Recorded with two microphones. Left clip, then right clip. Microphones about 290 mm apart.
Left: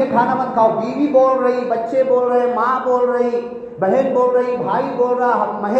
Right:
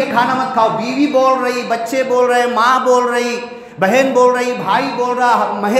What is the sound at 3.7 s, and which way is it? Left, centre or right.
Speech, right.